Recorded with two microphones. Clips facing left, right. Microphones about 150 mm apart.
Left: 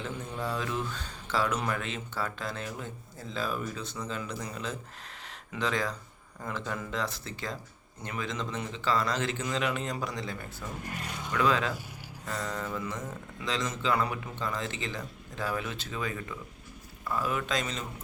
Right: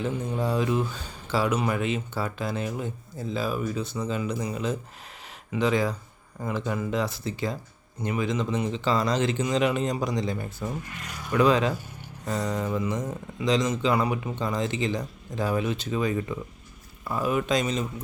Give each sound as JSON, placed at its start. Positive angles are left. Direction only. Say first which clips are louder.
{"t": 0.4, "sound": "speech", "louder": "right 7 dB", "side_deg": -15}
{"t": 11.0, "sound": "speech", "louder": "left 1 dB", "side_deg": 25}
{"t": 11.3, "sound": "speech", "louder": "right 6 dB", "side_deg": -20}